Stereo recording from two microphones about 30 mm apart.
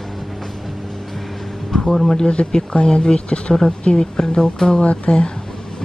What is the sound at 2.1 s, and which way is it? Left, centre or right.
Speech, left.